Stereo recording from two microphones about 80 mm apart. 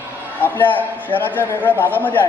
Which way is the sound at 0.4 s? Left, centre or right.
Left.